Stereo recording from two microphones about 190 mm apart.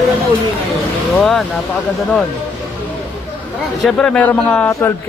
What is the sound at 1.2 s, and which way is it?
Speech, 5° left (ahead or behind).